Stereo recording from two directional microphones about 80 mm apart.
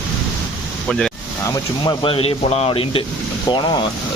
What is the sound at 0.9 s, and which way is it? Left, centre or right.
Speech, centre.